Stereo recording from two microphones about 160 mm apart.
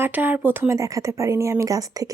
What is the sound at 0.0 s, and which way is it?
Speech, 10° right (ahead or behind).